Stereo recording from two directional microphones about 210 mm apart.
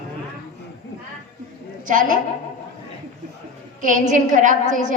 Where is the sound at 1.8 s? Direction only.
40° right (ahead or behind).